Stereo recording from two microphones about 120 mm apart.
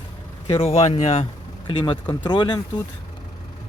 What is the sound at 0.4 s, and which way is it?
Speech, 55° left (ahead or behind).